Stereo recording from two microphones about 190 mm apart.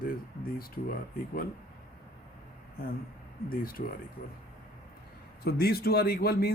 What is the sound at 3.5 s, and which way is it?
Speech, 50° left (ahead or behind).